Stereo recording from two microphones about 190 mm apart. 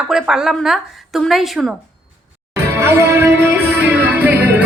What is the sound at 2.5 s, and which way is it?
Music, 15° right (ahead or behind).